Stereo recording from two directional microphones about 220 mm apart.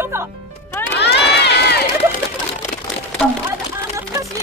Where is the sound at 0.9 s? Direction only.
50° left (ahead or behind).